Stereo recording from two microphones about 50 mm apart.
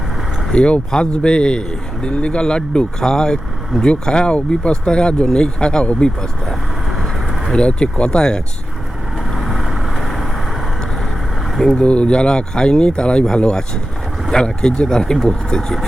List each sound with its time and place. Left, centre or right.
0.5 s speech: left
7.5 s speech: left
9.3 s vehicle: centre
11.7 s speech: left